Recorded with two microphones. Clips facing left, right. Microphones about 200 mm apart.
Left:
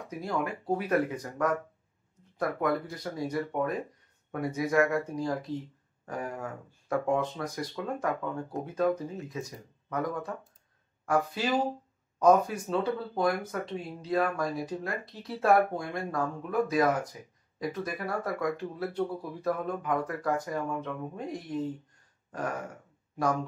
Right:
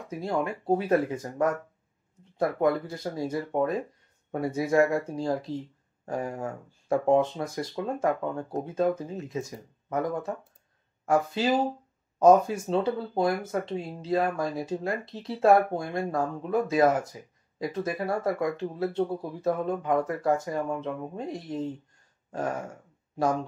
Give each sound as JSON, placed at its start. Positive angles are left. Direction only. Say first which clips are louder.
{"t": 0.2, "sound": "speech", "louder": "right 3 dB", "side_deg": -25}